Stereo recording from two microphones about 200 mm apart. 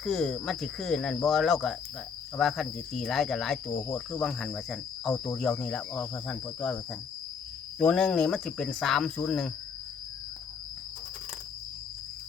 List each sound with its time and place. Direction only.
0.0 s cricket: centre (ahead or behind)
7.8 s cricket: 5° left (ahead or behind)